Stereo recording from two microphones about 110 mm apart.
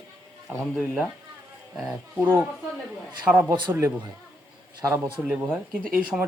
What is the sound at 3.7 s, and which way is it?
Speech, 25° right (ahead or behind).